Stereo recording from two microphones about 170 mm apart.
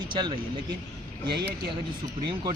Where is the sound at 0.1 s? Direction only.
25° right (ahead or behind).